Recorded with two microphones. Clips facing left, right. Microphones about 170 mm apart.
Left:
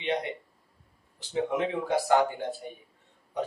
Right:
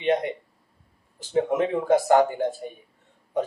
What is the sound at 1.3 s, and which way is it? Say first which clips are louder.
Speech: right 5 dB; 50° right (ahead or behind).